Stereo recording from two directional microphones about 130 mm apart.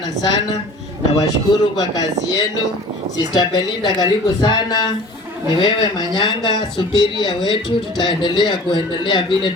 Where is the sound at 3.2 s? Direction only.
30° left (ahead or behind).